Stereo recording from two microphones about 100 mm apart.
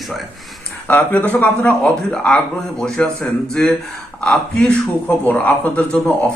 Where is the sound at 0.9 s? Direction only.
20° left (ahead or behind).